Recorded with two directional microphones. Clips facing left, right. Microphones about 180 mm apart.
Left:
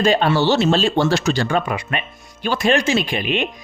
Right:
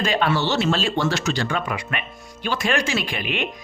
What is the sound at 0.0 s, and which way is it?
Speech, 30° left (ahead or behind).